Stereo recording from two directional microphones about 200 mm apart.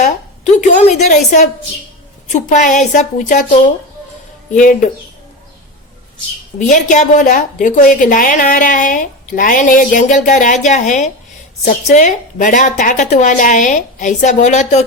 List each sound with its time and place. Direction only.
0.0 s a woman's voice: 35° left (ahead or behind)
4.5 s a woman's voice: 40° left (ahead or behind)
6.6 s a woman's voice: 40° left (ahead or behind)